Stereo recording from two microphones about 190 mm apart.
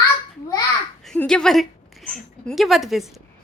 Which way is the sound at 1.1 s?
5° left (ahead or behind).